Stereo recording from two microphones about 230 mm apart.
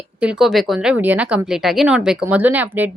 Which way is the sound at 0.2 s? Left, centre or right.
Centre.